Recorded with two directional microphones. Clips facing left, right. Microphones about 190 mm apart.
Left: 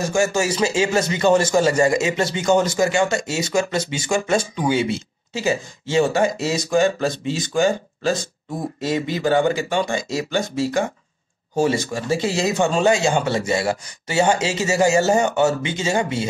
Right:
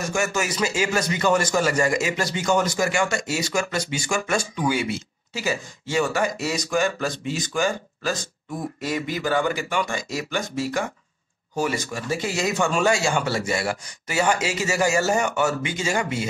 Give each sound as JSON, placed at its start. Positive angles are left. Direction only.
{"t": 0.0, "sound": "a man's voice", "side_deg": 30}